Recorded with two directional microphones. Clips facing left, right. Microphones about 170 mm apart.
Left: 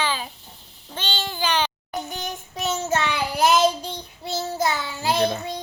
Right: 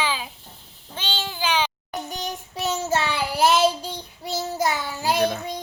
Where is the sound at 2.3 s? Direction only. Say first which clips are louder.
Right 2 dB; 10° right (ahead or behind).